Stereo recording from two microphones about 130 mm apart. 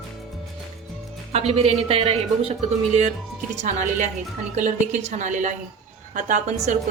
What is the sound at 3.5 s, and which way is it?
A woman's voice, 70° right (ahead or behind).